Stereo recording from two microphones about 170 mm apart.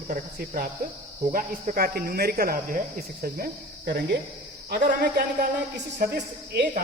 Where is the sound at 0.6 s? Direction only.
60° right (ahead or behind).